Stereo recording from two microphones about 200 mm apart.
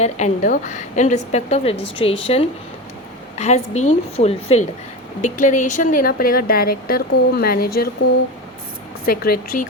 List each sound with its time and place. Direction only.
0.0 s a woman's voice: 40° left (ahead or behind)
9.0 s speech: 50° left (ahead or behind)